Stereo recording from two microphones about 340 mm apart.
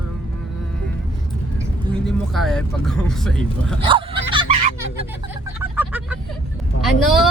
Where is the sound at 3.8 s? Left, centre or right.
Centre.